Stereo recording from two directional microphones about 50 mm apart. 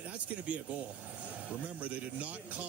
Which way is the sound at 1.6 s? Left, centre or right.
Right.